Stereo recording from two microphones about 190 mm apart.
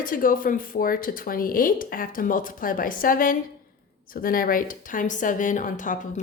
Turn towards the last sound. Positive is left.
turn(degrees=40)  # may be behind; listen again after turning